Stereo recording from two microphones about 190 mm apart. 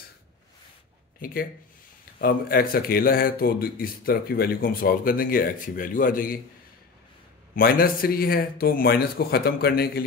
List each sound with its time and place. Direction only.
1.2 s speech: 50° left (ahead or behind)
7.5 s speech: 50° left (ahead or behind)